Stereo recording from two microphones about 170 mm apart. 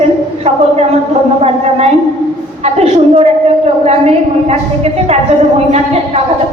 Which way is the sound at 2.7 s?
40° right (ahead or behind).